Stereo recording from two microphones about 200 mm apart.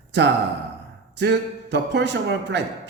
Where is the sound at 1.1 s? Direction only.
60° right (ahead or behind).